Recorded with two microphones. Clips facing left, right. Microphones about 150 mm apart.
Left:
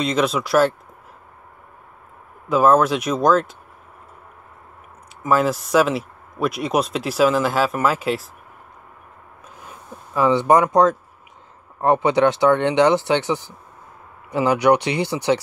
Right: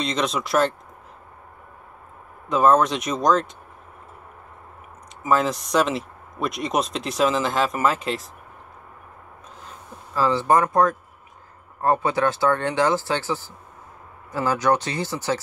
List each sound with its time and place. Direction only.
0.0 s a man's voice: 5° left (ahead or behind)
2.5 s a man's voice: 5° left (ahead or behind)
5.2 s a man's voice: 5° left (ahead or behind)
9.6 s a sound: 15° left (ahead or behind)
11.8 s speech: 20° left (ahead or behind)